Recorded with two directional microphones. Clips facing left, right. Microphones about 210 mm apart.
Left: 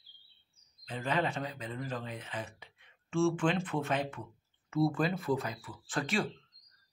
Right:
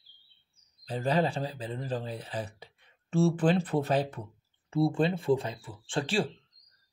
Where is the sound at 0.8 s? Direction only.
35° right (ahead or behind).